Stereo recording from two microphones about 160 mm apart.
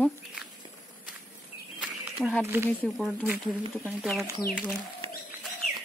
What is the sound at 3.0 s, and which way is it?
Speech, 5° right (ahead or behind).